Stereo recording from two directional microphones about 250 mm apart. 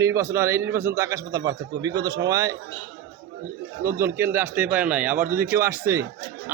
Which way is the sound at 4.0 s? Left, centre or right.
Centre.